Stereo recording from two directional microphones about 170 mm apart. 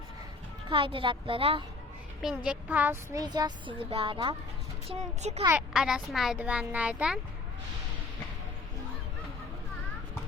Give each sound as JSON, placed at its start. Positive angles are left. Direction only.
{"t": 0.7, "sound": "a woman's voice", "side_deg": -30}
{"t": 2.2, "sound": "speech", "side_deg": -5}
{"t": 4.9, "sound": "a woman's voice", "side_deg": -40}
{"t": 5.5, "sound": "a child's voice", "side_deg": -5}